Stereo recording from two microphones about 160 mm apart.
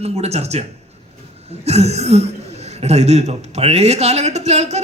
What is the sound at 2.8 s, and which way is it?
A woman's voice, 45° right (ahead or behind).